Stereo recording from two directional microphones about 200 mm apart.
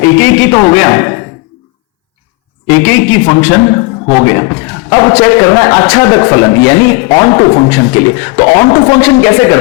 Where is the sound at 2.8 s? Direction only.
10° left (ahead or behind).